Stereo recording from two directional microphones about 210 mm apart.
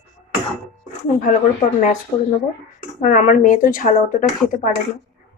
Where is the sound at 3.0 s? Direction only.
40° left (ahead or behind).